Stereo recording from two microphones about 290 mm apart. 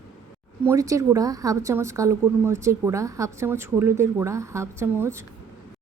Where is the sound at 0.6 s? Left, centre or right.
Centre.